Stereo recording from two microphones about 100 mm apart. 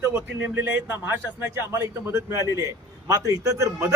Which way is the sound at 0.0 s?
25° right (ahead or behind).